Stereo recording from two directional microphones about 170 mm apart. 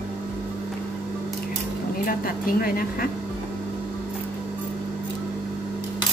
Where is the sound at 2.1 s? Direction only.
55° left (ahead or behind).